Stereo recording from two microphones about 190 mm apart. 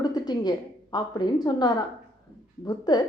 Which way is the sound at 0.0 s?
20° left (ahead or behind).